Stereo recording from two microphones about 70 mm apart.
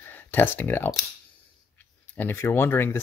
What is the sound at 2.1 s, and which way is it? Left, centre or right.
Speech, left.